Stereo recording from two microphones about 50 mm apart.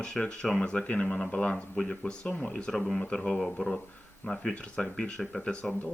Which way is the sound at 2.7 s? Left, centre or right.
Centre.